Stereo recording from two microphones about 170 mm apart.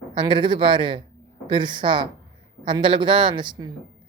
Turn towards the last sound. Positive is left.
turn(degrees=-25)  # may be behind; listen again after turning